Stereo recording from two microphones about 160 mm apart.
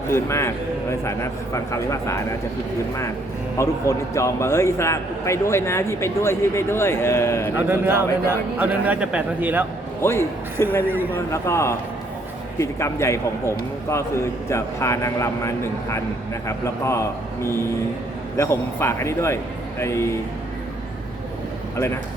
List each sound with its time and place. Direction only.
0.1 s a man's voice: 15° left (ahead or behind)
3.6 s a man's voice: 20° left (ahead or behind)
7.5 s a man's voice: 15° right (ahead or behind)
10.0 s a man's voice: 15° left (ahead or behind)